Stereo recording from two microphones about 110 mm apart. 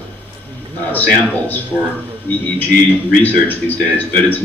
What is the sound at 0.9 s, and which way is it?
Speech, 15° left (ahead or behind).